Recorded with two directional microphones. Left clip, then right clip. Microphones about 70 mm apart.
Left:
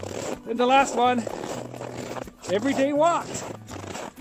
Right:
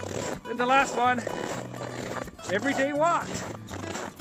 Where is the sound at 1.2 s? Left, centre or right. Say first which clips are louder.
Even; centre.